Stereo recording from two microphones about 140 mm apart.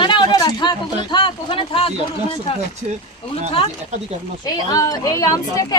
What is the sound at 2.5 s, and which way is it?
Speech, 45° left (ahead or behind).